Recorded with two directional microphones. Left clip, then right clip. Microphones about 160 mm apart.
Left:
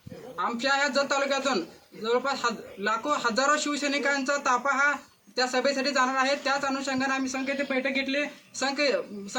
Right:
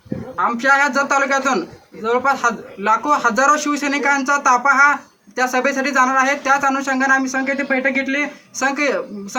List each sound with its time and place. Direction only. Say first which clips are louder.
0.4 s speech: right 11 dB; 15° right (ahead or behind)
7.3 s speech: right 10 dB; centre (ahead or behind)
8.5 s speech: right 8 dB; 15° right (ahead or behind)